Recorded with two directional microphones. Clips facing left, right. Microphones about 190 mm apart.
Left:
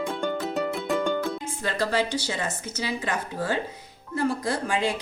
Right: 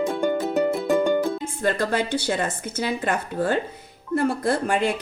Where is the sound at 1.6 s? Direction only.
55° right (ahead or behind).